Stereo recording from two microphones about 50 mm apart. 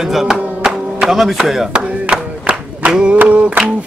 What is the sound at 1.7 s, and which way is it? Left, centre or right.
Clapping, right.